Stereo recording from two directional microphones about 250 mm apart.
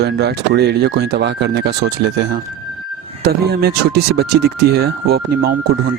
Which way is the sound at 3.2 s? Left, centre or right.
Right.